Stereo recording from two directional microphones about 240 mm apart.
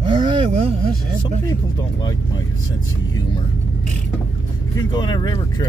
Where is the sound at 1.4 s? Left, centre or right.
Centre.